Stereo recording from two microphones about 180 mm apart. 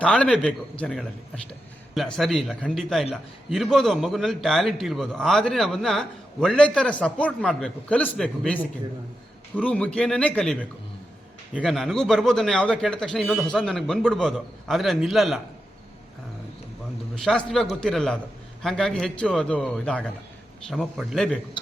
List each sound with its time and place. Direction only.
0.0 s a man's voice: 5° left (ahead or behind)
2.1 s a man's voice: centre (ahead or behind)
9.6 s a man's voice: 5° left (ahead or behind)
17.2 s a man's voice: 5° left (ahead or behind)